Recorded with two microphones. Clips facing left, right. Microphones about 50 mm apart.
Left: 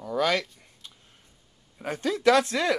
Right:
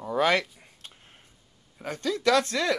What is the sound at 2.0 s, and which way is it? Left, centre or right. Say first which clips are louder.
Speech: left 2 dB; centre.